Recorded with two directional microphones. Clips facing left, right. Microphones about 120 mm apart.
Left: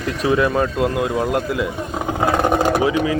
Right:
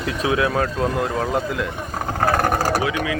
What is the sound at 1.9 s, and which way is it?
Vehicle, 15° left (ahead or behind).